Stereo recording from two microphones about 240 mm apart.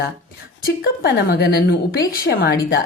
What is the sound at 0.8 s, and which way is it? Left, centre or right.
A woman's voice, left.